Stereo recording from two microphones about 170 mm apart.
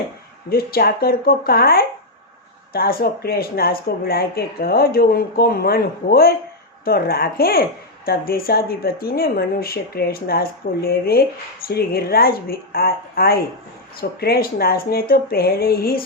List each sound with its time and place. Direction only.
0.5 s speech: 65° left (ahead or behind)